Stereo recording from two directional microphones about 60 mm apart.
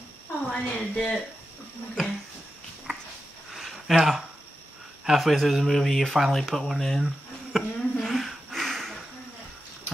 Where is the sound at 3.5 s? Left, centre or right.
Centre.